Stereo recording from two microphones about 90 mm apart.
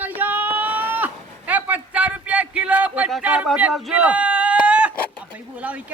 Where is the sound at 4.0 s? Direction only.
15° right (ahead or behind).